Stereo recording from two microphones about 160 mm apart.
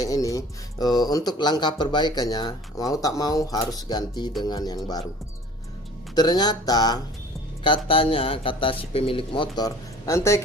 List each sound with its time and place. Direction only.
0.0 s speech: 20° left (ahead or behind)
6.1 s speech: 25° left (ahead or behind)